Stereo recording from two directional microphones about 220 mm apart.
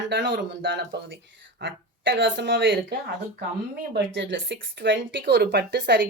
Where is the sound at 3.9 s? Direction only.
55° right (ahead or behind).